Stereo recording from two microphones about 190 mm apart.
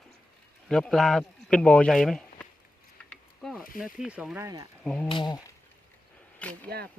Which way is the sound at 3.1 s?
Centre (ahead or behind).